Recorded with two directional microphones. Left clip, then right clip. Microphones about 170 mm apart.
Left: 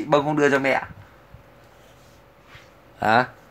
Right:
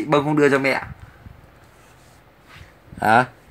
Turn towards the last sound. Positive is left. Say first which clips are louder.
# right 3 dB
turn(degrees=-20)  # may be behind; listen again after turning